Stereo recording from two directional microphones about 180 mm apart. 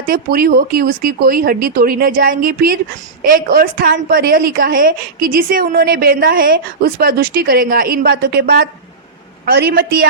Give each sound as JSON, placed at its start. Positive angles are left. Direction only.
{"t": 0.1, "sound": "a woman's voice", "side_deg": -55}